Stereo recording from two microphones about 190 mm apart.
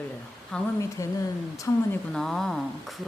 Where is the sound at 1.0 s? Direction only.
15° left (ahead or behind).